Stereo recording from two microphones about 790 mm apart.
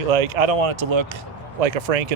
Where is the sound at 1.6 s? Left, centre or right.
Right.